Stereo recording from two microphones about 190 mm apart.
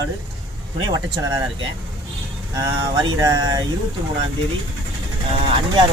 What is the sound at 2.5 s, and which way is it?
Speech, 15° right (ahead or behind).